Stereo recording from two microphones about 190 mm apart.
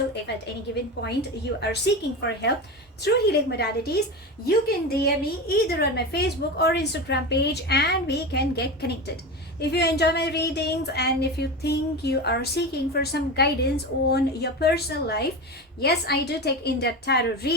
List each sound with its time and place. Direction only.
0.3 s speech: 60° left (ahead or behind)
1.6 s speech: 60° left (ahead or behind)